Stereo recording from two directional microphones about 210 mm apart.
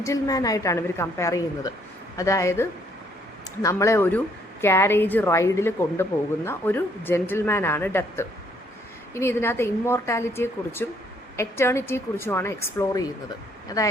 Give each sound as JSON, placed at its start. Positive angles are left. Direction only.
{"t": 0.0, "sound": "a woman's voice", "side_deg": 15}